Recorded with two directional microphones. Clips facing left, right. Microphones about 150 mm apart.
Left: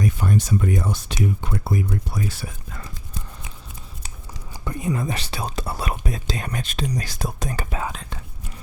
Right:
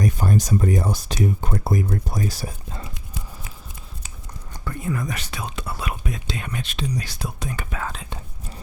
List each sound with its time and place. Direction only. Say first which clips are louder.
0.0 s speech: right 1 dB; 40° right (ahead or behind)
4.6 s speech: left 2 dB; 20° left (ahead or behind); by 7.8 s 35° left (ahead or behind)